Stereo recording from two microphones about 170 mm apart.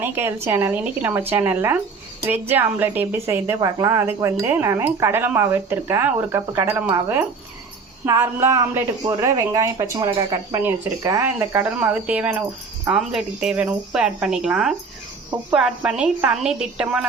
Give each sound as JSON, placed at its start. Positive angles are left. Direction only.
{"t": 0.0, "sound": "a woman's voice", "side_deg": -15}